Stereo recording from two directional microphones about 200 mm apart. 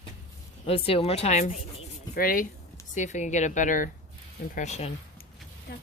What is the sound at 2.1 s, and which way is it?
A woman's voice, 45° left (ahead or behind).